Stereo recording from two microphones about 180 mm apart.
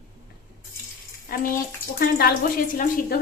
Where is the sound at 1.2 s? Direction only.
50° left (ahead or behind).